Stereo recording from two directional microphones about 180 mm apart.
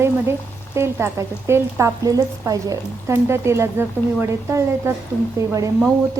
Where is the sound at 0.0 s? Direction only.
15° right (ahead or behind).